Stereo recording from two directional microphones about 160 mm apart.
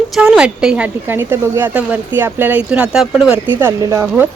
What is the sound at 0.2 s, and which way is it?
A woman's voice, 5° right (ahead or behind).